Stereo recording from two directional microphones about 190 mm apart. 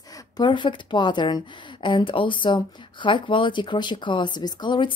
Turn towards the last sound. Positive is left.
turn(degrees=25)  # may be behind; listen again after turning